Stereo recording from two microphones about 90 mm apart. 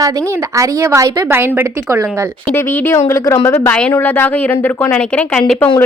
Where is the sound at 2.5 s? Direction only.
25° left (ahead or behind).